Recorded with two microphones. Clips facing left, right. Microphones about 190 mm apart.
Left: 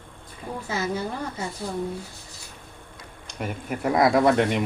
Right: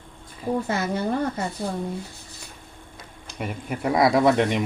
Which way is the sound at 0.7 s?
60° right (ahead or behind).